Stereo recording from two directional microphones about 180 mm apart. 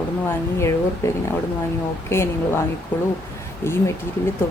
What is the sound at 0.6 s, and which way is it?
A woman's voice, 15° left (ahead or behind).